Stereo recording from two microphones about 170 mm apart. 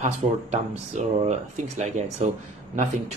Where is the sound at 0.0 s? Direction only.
40° right (ahead or behind).